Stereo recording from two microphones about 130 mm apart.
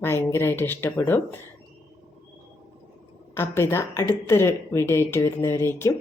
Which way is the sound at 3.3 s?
20° left (ahead or behind).